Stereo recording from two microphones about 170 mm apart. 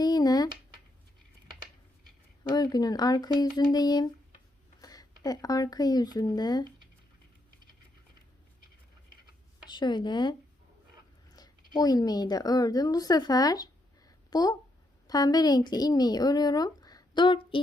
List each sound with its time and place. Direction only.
0.0 s a sound: 25° left (ahead or behind)
2.4 s speech: 25° left (ahead or behind)
9.6 s a woman's voice: 25° left (ahead or behind)